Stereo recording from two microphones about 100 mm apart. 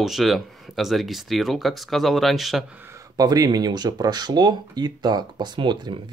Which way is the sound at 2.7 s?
20° right (ahead or behind).